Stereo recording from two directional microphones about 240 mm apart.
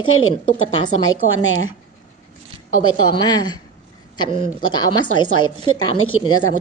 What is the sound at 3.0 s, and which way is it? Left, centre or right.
Speech, centre.